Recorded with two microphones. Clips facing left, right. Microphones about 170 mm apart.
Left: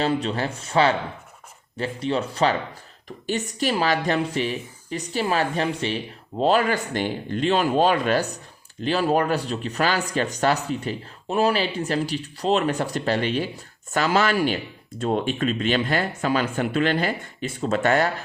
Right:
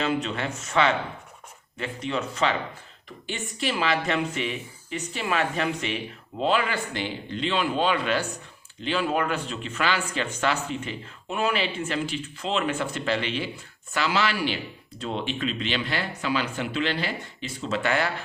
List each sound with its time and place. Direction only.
0.0 s speech: 35° left (ahead or behind)